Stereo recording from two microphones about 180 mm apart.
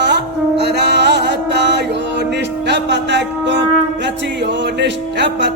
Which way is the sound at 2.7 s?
75° right (ahead or behind).